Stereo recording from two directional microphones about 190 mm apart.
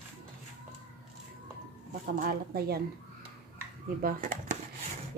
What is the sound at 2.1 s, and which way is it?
Speech, 50° right (ahead or behind).